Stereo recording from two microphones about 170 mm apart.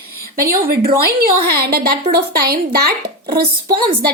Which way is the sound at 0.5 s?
60° right (ahead or behind).